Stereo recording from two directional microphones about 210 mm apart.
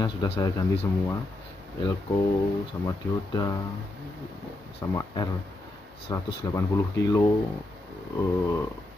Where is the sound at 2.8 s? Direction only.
20° left (ahead or behind).